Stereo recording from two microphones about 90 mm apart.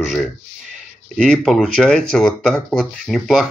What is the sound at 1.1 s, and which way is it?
Speech, 5° left (ahead or behind).